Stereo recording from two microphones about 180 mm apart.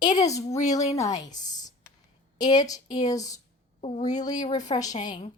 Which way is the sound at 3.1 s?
20° left (ahead or behind).